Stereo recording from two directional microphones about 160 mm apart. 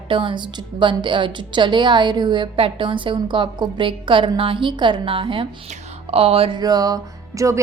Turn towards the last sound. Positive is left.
turn(degrees=-20)  # may be behind; listen again after turning